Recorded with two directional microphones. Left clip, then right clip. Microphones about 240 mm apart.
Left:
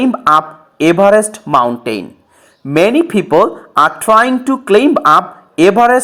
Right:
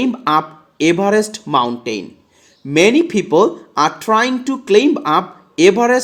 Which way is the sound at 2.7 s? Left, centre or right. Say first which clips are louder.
Left 2 dB; centre.